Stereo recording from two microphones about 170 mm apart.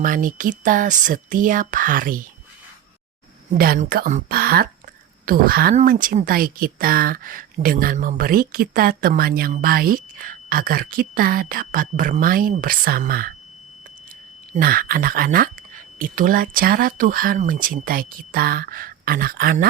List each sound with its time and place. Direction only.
0.0 s speech: 50° right (ahead or behind)
3.5 s speech: 55° right (ahead or behind)
14.6 s speech: 60° right (ahead or behind)